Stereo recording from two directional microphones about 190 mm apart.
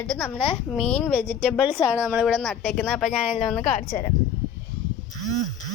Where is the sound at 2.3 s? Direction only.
5° left (ahead or behind).